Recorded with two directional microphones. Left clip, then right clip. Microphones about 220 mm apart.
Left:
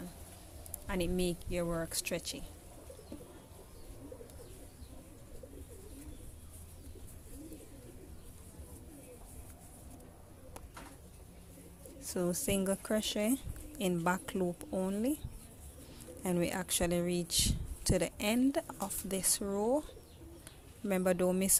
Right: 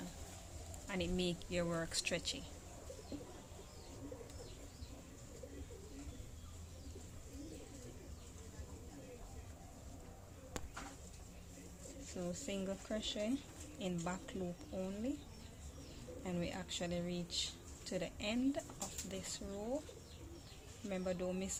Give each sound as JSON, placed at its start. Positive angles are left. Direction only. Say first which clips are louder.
{"t": 0.9, "sound": "speech", "louder": "left 5 dB", "side_deg": 30}
{"t": 12.1, "sound": "speech", "louder": "left 10 dB", "side_deg": 40}
{"t": 16.2, "sound": "speech", "louder": "left 10 dB", "side_deg": 35}
{"t": 20.9, "sound": "speech", "louder": "left 10 dB", "side_deg": 40}